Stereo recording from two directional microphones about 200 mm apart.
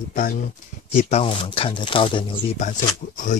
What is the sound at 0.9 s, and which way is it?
Speech, 30° left (ahead or behind).